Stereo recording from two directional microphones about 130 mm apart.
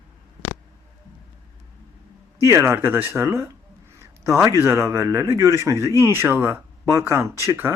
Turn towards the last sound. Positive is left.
turn(degrees=-20)  # may be behind; listen again after turning